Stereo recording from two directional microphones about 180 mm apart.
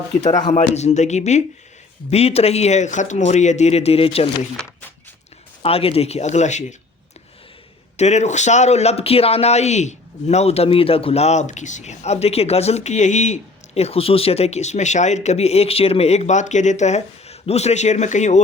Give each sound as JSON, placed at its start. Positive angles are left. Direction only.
{"t": 0.2, "sound": "speech", "side_deg": 40}
{"t": 5.6, "sound": "speech", "side_deg": 35}
{"t": 7.9, "sound": "speech", "side_deg": 40}